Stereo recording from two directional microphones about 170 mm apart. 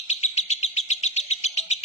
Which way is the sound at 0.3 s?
40° left (ahead or behind).